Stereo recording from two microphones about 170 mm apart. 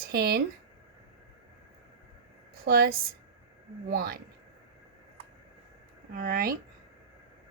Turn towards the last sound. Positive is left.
turn(degrees=-55)  # may be behind; listen again after turning